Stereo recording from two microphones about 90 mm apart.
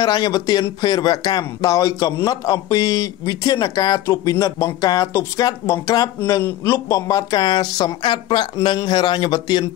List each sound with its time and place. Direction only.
0.0 s speech: 50° left (ahead or behind)